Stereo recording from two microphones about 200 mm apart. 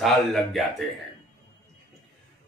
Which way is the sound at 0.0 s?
Centre (ahead or behind).